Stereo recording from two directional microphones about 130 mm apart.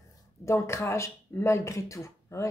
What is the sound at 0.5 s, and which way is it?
Speech, 20° left (ahead or behind).